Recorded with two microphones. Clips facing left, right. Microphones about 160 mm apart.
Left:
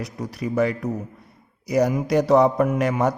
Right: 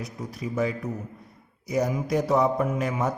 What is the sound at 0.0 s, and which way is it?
A man's voice, 70° left (ahead or behind).